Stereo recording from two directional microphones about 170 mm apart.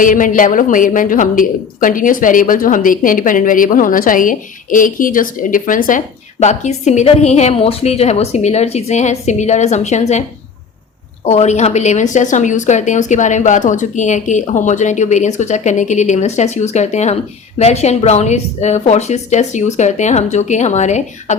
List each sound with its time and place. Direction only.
0.0 s a woman's voice: 50° left (ahead or behind)
11.3 s a woman's voice: 40° left (ahead or behind)